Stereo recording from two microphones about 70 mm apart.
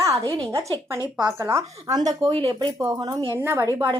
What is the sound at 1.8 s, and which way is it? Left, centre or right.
Speech, right.